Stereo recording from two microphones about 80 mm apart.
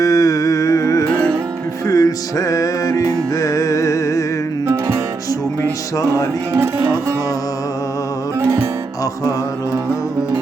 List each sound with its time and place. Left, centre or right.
0.0 s music: left
4.6 s music: right
6.6 s music: right
8.4 s music: right